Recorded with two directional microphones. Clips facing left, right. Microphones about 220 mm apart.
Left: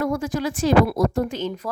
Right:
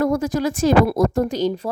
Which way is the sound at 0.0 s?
40° right (ahead or behind).